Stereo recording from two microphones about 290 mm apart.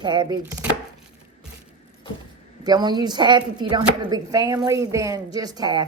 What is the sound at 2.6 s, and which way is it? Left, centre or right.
Speech, centre.